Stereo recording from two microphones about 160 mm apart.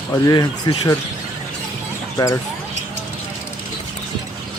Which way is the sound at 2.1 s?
20° left (ahead or behind).